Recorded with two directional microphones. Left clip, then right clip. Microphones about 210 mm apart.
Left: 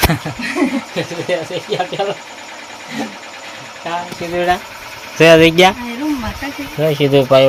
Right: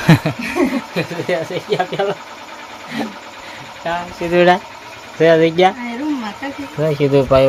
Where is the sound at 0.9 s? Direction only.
Centre (ahead or behind).